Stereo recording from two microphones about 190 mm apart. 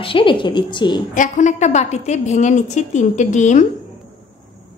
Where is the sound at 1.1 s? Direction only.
40° left (ahead or behind).